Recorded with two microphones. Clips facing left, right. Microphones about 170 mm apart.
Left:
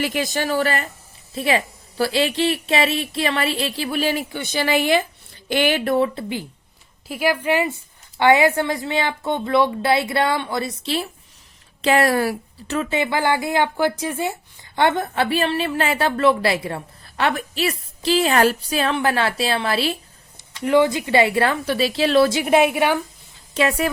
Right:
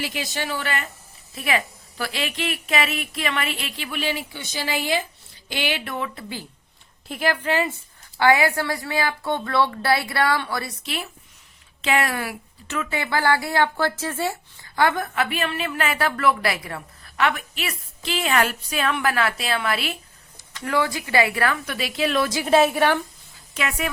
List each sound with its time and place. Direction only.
0.0 s a woman's voice: 50° left (ahead or behind)
5.5 s speech: 50° left (ahead or behind); by 6.2 s 35° left (ahead or behind)
7.1 s a woman's voice: 10° left (ahead or behind); by 20.0 s 30° left (ahead or behind)
20.6 s a woman's voice: 20° left (ahead or behind)
22.4 s a woman's voice: 15° left (ahead or behind)
23.6 s a woman's voice: 35° left (ahead or behind)